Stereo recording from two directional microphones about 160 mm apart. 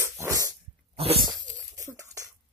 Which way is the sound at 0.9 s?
35° right (ahead or behind).